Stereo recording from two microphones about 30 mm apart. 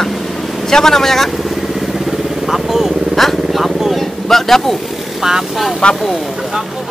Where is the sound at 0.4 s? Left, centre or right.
Centre.